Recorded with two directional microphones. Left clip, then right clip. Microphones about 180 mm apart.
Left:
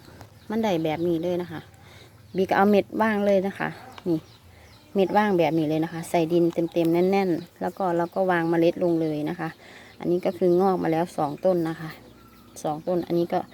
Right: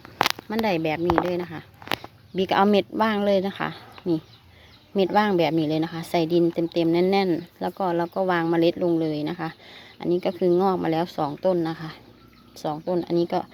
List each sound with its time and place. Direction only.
0.4 s speech: 5° left (ahead or behind)